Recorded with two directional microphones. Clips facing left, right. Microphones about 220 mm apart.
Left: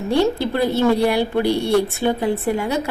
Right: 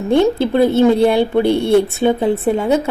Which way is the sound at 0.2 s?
20° right (ahead or behind).